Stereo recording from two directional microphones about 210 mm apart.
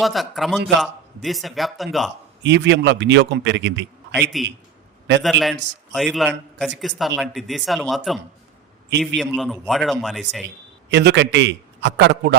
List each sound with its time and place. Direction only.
0.0 s a man's voice: centre (ahead or behind)
2.4 s a man's voice: 55° right (ahead or behind)
4.1 s a man's voice: centre (ahead or behind)
10.8 s a man's voice: 55° right (ahead or behind)